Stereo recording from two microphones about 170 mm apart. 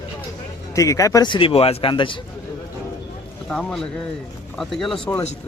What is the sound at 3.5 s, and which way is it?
Speech, 5° left (ahead or behind).